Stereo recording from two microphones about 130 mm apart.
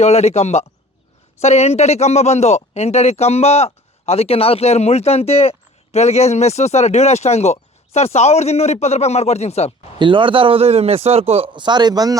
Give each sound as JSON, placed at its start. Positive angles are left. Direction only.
{"t": 0.0, "sound": "speech", "side_deg": 55}
{"t": 10.0, "sound": "a man's voice", "side_deg": -40}